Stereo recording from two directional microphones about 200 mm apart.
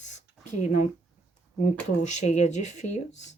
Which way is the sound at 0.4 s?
35° left (ahead or behind).